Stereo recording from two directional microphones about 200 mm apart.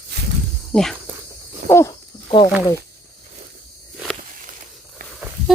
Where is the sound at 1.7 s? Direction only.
10° left (ahead or behind).